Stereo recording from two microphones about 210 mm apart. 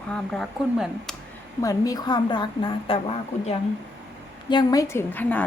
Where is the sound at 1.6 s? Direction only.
15° left (ahead or behind).